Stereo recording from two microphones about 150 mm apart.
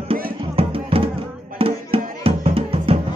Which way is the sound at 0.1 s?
40° right (ahead or behind).